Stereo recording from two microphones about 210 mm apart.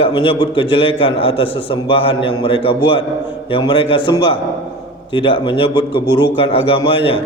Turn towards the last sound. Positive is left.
turn(degrees=25)  # may be behind; listen again after turning